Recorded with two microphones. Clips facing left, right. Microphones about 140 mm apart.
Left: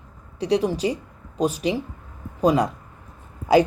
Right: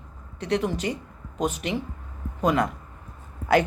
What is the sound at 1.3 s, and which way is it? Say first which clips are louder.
Speech: left 4 dB; 35° left (ahead or behind).